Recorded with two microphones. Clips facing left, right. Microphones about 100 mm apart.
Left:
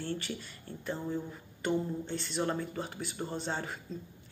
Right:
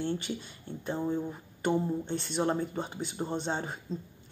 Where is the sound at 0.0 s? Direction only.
20° right (ahead or behind).